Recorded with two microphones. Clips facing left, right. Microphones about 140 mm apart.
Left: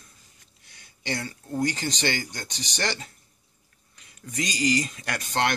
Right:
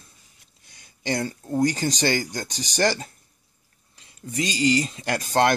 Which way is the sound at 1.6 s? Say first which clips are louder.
Right 5 dB; 40° right (ahead or behind).